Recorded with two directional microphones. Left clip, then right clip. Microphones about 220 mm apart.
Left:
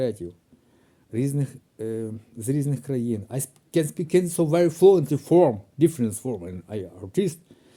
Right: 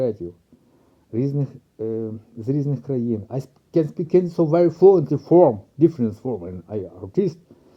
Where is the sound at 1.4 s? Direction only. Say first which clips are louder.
Right 4 dB; 20° left (ahead or behind).